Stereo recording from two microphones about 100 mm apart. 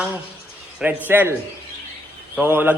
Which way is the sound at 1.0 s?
20° right (ahead or behind).